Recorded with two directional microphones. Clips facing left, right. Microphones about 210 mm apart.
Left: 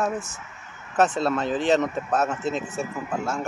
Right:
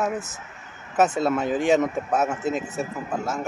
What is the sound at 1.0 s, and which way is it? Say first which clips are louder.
Speech: right 1 dB; 10° right (ahead or behind).